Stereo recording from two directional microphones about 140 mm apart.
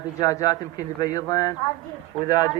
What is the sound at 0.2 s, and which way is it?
Speech, 25° left (ahead or behind).